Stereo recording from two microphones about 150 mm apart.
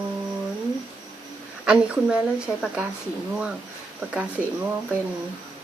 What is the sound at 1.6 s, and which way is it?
A woman's voice, 5° right (ahead or behind).